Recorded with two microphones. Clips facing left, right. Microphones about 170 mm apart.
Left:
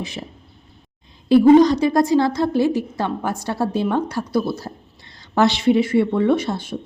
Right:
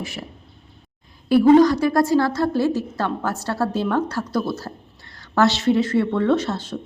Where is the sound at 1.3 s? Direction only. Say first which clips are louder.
Left 2 dB; 20° left (ahead or behind).